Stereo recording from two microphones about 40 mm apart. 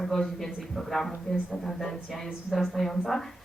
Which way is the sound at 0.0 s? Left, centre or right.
Centre.